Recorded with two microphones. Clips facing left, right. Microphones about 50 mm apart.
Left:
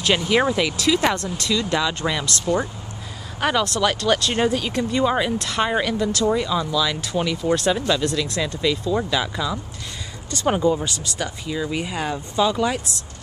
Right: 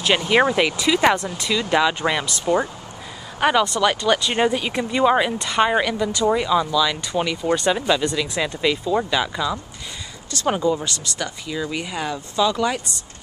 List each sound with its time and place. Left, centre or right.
0.0 s speech: centre
10.7 s speech: centre